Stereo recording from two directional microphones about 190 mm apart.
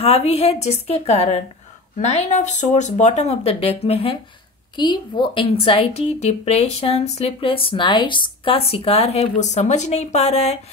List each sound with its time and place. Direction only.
0.0 s a woman's voice: 30° left (ahead or behind)